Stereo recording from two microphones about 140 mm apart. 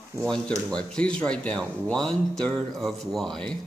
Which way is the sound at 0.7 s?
5° left (ahead or behind).